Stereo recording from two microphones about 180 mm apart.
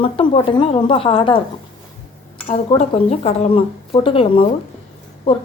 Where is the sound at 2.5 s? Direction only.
35° left (ahead or behind).